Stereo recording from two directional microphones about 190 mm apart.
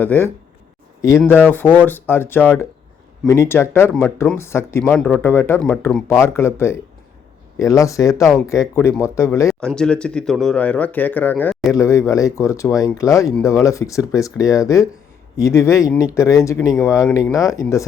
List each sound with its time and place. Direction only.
0.0 s speech: 10° left (ahead or behind)
1.3 s speech: 10° left (ahead or behind)
9.5 s speech: 5° left (ahead or behind)